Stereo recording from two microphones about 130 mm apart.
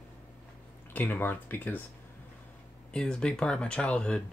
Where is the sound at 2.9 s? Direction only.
5° left (ahead or behind).